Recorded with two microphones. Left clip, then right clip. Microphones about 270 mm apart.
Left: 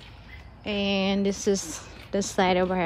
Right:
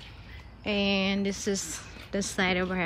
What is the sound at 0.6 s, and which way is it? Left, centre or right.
Speech, centre.